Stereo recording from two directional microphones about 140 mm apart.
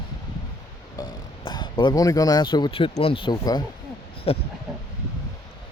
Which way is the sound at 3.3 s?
25° left (ahead or behind).